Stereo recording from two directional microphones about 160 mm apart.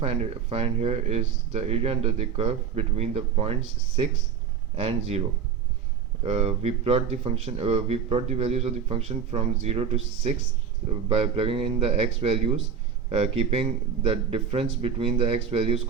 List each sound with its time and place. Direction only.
0.0 s speech: 40° right (ahead or behind)
6.2 s speech: 40° right (ahead or behind)